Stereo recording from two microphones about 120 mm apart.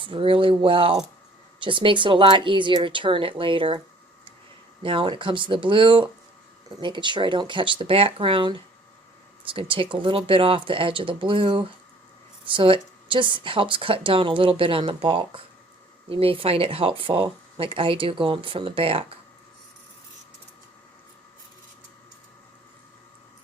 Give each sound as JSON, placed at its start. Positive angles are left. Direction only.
{"t": 0.0, "sound": "speech", "side_deg": -45}
{"t": 4.8, "sound": "speech", "side_deg": -45}